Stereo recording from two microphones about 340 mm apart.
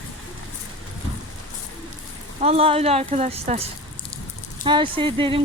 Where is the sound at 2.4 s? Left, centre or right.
Centre.